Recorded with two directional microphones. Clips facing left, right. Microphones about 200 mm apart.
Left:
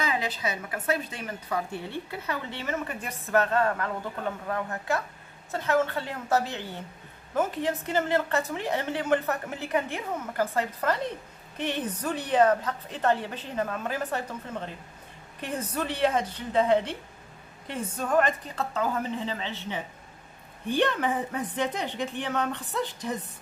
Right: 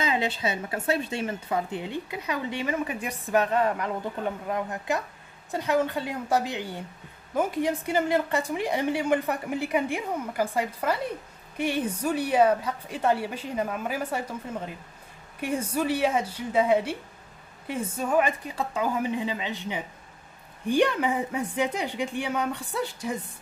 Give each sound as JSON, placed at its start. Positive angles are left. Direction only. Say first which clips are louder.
{"t": 0.0, "sound": "a woman's voice", "louder": "right 3 dB", "side_deg": -25}